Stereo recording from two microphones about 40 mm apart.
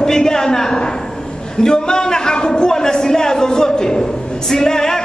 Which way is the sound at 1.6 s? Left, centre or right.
Centre.